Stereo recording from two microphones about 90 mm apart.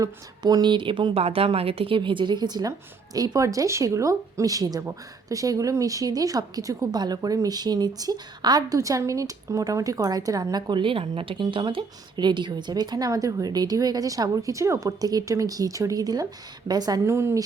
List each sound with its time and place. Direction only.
0.0 s a woman's voice: 45° right (ahead or behind)
10.7 s speech: 70° right (ahead or behind); by 17.0 s 45° right (ahead or behind)
17.1 s a woman's voice: 30° right (ahead or behind)